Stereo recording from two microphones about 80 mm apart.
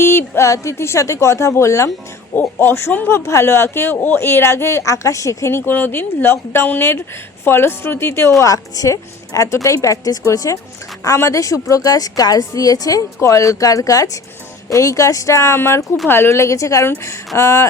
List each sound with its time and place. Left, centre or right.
0.0 s a woman's voice: left
8.4 s a woman's voice: left
13.1 s a woman's voice: left